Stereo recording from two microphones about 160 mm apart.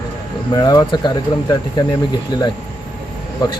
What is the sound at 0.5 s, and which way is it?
Speech, 25° left (ahead or behind).